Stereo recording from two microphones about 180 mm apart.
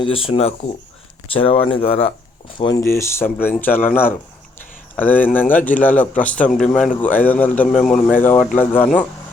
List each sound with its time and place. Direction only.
0.0 s speech: 30° left (ahead or behind)
2.6 s a man's voice: 20° left (ahead or behind)